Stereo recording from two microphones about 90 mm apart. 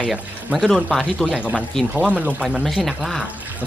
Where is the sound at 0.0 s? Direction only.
5° right (ahead or behind).